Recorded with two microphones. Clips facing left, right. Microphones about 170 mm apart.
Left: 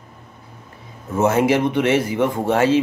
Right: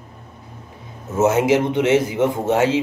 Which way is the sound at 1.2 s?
20° right (ahead or behind).